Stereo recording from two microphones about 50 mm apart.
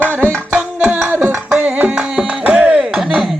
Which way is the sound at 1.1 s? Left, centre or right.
Right.